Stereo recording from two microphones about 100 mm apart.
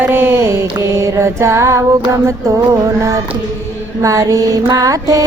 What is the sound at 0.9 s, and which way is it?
Female singing, 30° right (ahead or behind).